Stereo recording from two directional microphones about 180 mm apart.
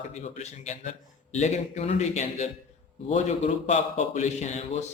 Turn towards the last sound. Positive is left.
turn(degrees=40)  # may be behind; listen again after turning